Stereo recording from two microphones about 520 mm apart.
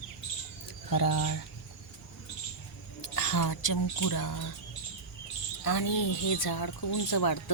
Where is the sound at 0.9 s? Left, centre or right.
Left.